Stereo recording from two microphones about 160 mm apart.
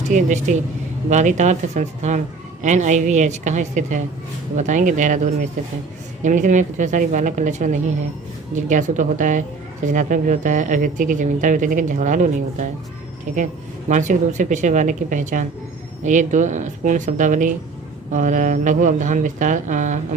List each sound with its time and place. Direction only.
0.0 s speech: 50° right (ahead or behind)